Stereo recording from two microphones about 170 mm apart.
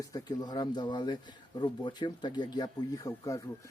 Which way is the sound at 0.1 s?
25° left (ahead or behind).